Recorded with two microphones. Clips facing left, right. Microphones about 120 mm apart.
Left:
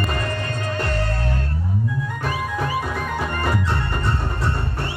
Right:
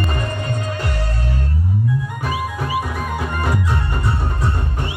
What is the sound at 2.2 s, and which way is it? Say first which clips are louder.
Music: even; 10° right (ahead or behind).